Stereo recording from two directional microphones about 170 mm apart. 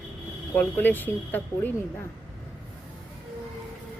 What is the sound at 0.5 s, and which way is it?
Speech, 10° left (ahead or behind).